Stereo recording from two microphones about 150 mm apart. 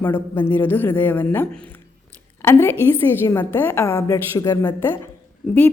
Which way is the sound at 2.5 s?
15° left (ahead or behind).